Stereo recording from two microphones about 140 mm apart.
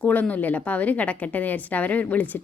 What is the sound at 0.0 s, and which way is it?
A woman's voice, 10° left (ahead or behind).